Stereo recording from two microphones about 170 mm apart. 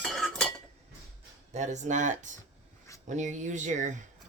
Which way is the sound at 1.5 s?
45° right (ahead or behind).